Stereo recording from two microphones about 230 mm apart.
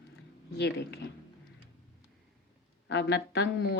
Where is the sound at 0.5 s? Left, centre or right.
Left.